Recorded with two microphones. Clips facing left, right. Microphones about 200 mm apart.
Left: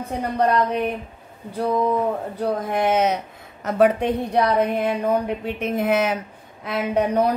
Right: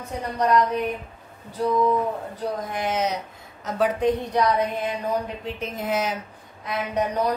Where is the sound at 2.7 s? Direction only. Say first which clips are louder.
Left 7 dB; 60° left (ahead or behind).